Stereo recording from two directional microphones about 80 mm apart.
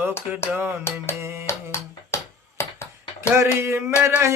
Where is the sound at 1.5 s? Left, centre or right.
Left.